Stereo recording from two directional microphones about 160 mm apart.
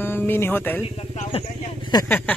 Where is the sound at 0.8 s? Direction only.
40° left (ahead or behind).